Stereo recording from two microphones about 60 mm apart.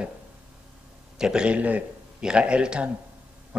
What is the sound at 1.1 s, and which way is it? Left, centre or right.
A man's voice, centre.